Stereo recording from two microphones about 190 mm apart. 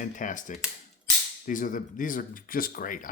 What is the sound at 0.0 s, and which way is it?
Speech, 45° left (ahead or behind).